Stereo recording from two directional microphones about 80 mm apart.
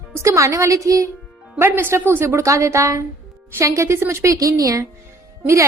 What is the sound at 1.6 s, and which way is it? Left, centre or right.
A woman's voice, right.